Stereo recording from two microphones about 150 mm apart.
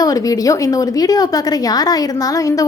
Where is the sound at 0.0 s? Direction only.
25° left (ahead or behind).